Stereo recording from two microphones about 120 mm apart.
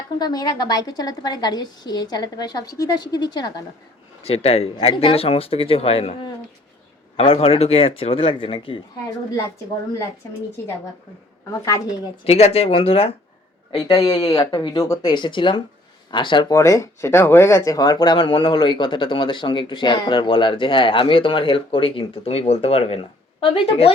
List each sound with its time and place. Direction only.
0.2 s a woman's voice: 35° left (ahead or behind)
4.2 s speech: 60° left (ahead or behind)
7.2 s speech: 55° left (ahead or behind)
11.5 s a woman's voice: 25° left (ahead or behind)
12.2 s speech: 55° left (ahead or behind)
13.7 s a woman's voice: 35° left (ahead or behind)
16.5 s speech: 25° left (ahead or behind); by 23.9 s 50° left (ahead or behind)